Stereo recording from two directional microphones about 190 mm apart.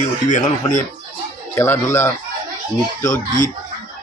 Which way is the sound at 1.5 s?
10° left (ahead or behind).